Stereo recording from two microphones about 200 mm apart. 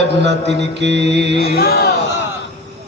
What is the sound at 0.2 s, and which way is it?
A man's voice, 60° right (ahead or behind).